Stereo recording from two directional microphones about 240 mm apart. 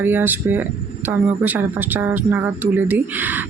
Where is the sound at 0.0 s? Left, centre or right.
Centre.